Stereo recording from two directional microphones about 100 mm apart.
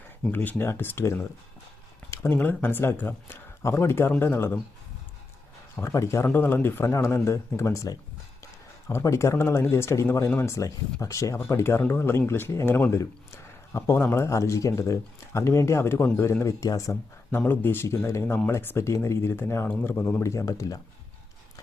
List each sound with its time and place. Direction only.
0.3 s speech: 20° left (ahead or behind)
5.8 s speech: 30° left (ahead or behind)
17.4 s speech: 20° left (ahead or behind)
20.2 s speech: 30° left (ahead or behind)